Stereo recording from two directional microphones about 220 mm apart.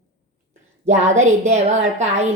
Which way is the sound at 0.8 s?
30° right (ahead or behind).